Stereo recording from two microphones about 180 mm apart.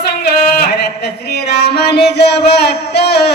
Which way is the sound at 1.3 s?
65° left (ahead or behind).